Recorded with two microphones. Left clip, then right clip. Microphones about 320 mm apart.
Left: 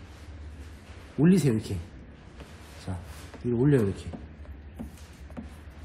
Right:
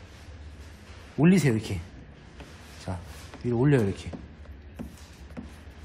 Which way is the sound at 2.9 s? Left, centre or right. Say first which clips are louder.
Right 4 dB; centre.